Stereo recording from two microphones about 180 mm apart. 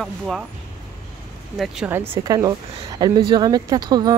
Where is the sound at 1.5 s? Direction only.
Centre (ahead or behind).